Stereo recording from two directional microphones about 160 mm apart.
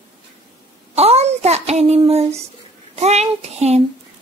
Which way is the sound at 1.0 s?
40° right (ahead or behind).